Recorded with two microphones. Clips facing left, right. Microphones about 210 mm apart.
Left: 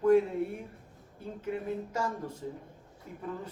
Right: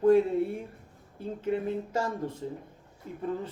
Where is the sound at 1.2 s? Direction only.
30° right (ahead or behind).